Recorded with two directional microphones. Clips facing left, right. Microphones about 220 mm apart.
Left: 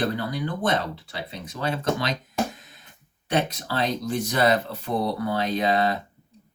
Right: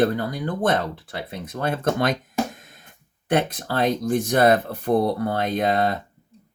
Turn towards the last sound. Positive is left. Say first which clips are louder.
# right 1 dB
turn(degrees=-50)  # may be behind; listen again after turning